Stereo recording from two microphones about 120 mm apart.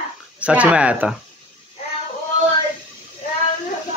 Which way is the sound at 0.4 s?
10° right (ahead or behind).